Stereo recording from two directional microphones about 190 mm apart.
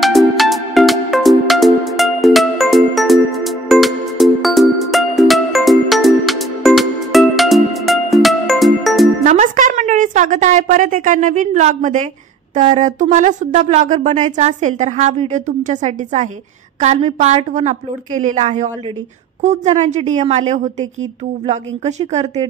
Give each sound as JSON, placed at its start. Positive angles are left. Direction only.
{"t": 0.0, "sound": "music", "side_deg": 0}
{"t": 9.2, "sound": "a woman's voice", "side_deg": -40}